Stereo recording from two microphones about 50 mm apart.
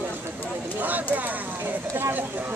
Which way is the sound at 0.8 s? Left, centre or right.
Right.